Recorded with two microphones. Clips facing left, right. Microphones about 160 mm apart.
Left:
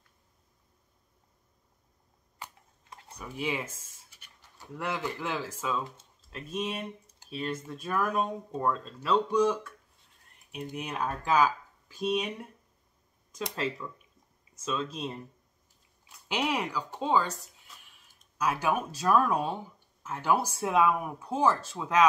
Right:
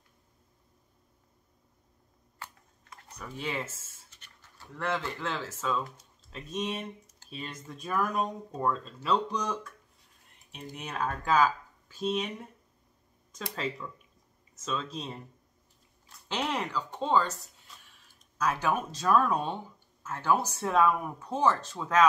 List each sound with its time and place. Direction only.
2.3 s a sound: 15° left (ahead or behind)
3.2 s speech: 10° left (ahead or behind)
7.2 s a sound: 15° left (ahead or behind)
7.6 s speech: centre (ahead or behind)
13.3 s speech: 10° left (ahead or behind)
16.1 s speech: 10° left (ahead or behind)